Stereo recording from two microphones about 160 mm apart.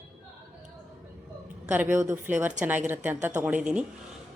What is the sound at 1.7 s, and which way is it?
Speech, 10° right (ahead or behind).